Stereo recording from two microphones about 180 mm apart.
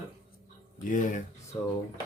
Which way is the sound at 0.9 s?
45° left (ahead or behind).